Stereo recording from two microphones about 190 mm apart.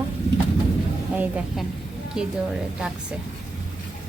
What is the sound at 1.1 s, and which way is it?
Speech, 5° right (ahead or behind).